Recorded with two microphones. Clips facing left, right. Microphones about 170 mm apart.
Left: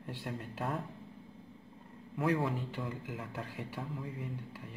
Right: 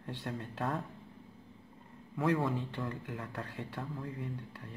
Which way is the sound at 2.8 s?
10° left (ahead or behind).